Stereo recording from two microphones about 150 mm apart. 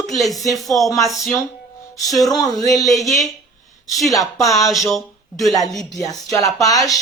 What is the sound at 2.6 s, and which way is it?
Speech, 25° left (ahead or behind).